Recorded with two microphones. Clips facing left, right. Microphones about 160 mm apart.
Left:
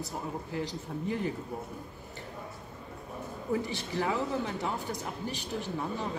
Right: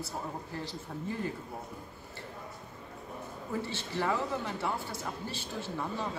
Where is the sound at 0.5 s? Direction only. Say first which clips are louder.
Left 4 dB; 15° left (ahead or behind).